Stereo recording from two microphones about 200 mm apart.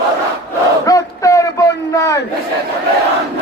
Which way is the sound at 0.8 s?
15° left (ahead or behind).